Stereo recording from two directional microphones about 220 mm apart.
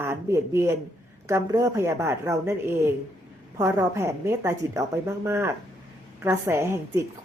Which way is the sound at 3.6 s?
10° right (ahead or behind).